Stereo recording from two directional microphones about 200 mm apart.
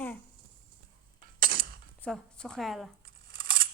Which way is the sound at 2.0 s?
5° left (ahead or behind).